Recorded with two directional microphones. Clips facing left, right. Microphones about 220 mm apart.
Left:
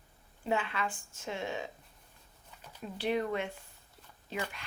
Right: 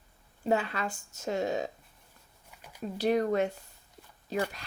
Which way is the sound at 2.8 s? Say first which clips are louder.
Right 5 dB; 40° right (ahead or behind).